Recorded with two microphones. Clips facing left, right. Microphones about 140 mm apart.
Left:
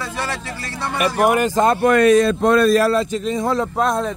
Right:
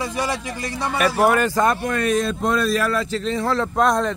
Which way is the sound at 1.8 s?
85° left.